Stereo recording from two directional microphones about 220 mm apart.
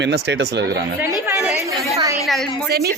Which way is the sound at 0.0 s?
50° right (ahead or behind).